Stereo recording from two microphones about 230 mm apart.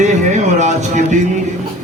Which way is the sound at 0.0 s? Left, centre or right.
Right.